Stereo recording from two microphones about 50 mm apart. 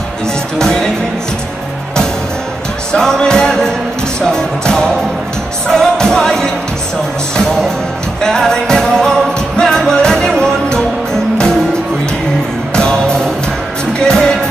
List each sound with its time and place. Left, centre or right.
2.9 s music: centre
12.7 s music: centre